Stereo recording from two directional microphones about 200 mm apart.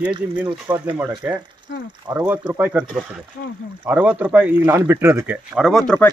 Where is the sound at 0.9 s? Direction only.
10° right (ahead or behind).